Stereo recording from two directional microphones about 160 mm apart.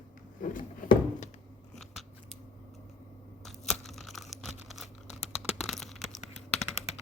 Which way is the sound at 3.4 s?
Centre (ahead or behind).